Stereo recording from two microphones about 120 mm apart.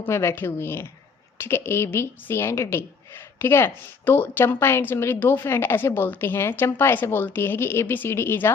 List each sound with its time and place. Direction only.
0.0 s a woman's voice: 20° left (ahead or behind)